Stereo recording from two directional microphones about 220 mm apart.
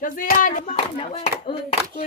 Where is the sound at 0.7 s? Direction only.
25° left (ahead or behind).